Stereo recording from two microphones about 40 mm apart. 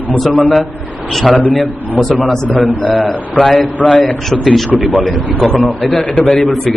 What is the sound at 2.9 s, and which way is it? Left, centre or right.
Speech, left.